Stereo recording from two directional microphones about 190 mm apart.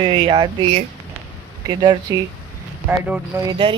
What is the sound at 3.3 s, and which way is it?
Speech, 25° right (ahead or behind).